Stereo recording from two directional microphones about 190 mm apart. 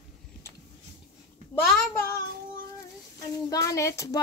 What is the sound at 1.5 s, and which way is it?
Speech, 5° left (ahead or behind).